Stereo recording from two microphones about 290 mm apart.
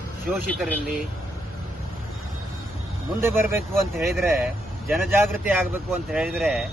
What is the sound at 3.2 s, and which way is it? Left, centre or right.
Speech, centre.